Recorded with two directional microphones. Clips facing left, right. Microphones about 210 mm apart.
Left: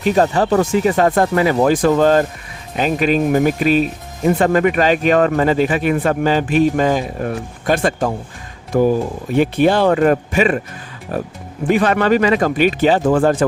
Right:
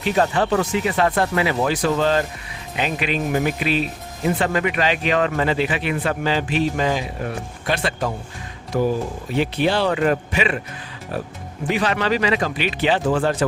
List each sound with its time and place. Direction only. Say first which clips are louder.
0.0 s speech: left 5 dB; 40° left (ahead or behind)